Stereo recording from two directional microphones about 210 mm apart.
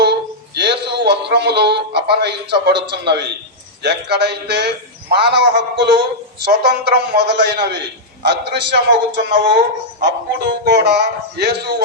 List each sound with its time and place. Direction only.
0.0 s music: 50° right (ahead or behind)
2.6 s a man's voice: 55° right (ahead or behind)